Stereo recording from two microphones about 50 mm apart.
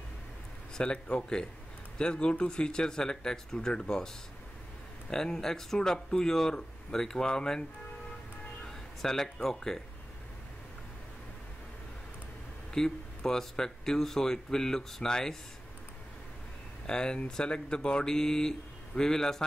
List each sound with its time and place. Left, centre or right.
0.7 s speech: centre
5.1 s speech: centre
8.6 s speech: centre
12.7 s speech: centre
16.8 s speech: centre